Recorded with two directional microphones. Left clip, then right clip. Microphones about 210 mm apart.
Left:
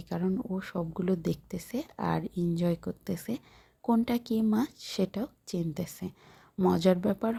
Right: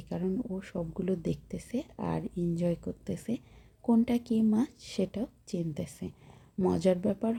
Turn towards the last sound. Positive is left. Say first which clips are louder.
# left 1 dB
turn(degrees=10)  # may be behind; listen again after turning